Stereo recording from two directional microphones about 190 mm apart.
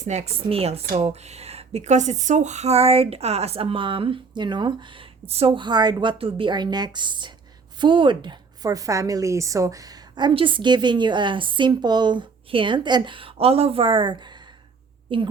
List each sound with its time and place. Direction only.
0.0 s a woman's voice: 35° right (ahead or behind)